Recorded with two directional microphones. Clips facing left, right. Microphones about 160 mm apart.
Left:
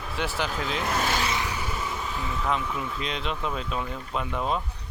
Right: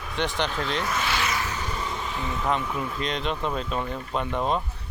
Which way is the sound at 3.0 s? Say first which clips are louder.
Right 5 dB; centre (ahead or behind).